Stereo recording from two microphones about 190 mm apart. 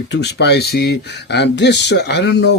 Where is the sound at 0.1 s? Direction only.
65° left (ahead or behind).